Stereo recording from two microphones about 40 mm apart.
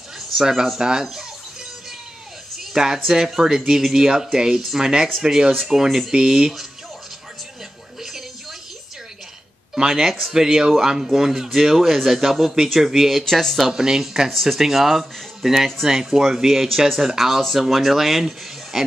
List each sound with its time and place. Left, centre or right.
0.4 s speech: centre
2.7 s speech: centre
9.8 s speech: centre
13.2 s speech: centre
13.7 s speech: centre